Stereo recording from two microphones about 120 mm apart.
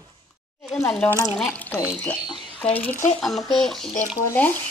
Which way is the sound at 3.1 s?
Centre (ahead or behind).